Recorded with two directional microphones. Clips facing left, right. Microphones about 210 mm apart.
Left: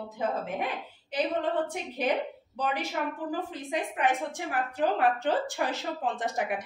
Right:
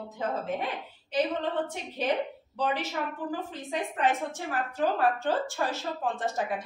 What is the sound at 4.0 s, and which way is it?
A woman's voice, 15° left (ahead or behind).